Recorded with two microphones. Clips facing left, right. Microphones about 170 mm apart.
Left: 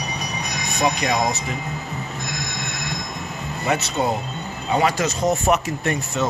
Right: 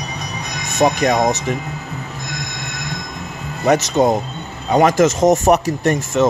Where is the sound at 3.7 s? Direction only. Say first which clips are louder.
Right 8 dB; 40° right (ahead or behind).